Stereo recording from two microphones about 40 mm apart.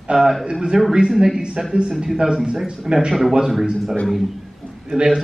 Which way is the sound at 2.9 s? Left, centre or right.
Centre.